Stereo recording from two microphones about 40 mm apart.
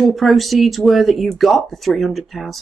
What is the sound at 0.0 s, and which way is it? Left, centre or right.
A woman's voice, centre.